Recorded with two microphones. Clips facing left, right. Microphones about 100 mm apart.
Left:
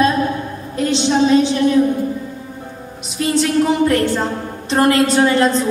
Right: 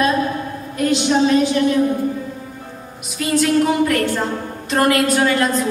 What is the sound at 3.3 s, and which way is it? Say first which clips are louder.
Music: even; 25° left (ahead or behind).